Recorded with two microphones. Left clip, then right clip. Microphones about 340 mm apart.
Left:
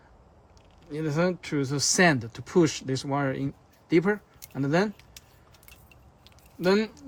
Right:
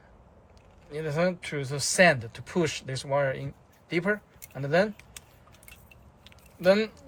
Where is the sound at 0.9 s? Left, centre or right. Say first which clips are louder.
Even; centre.